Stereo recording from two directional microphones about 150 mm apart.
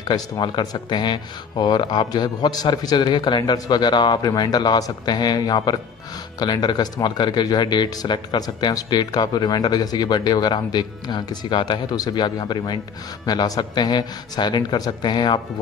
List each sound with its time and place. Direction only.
0.1 s speech: 30° left (ahead or behind)